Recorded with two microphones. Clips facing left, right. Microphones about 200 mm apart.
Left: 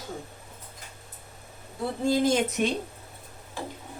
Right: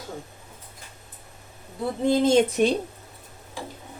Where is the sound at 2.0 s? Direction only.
25° right (ahead or behind).